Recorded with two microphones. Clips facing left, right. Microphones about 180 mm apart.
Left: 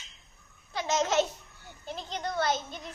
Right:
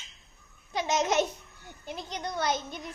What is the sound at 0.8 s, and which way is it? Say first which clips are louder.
Babbling: even; 15° right (ahead or behind).